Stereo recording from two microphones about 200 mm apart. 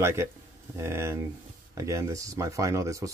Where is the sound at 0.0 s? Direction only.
15° right (ahead or behind).